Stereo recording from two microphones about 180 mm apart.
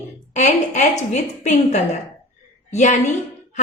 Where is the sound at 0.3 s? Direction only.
40° left (ahead or behind).